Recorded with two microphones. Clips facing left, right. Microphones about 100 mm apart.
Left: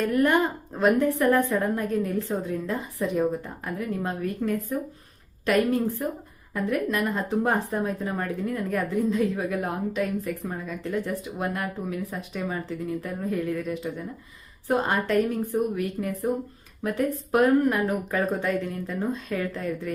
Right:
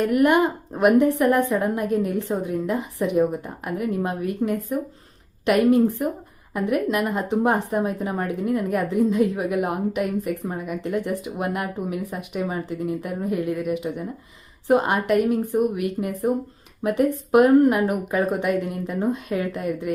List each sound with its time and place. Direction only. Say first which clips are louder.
0.0 s a woman's voice: right 4 dB; 15° right (ahead or behind)
17.3 s speech: right 5 dB; 30° right (ahead or behind)
17.7 s a woman's voice: right 3 dB; 15° right (ahead or behind)